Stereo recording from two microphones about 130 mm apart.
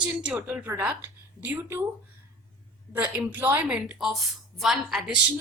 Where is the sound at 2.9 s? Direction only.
15° right (ahead or behind).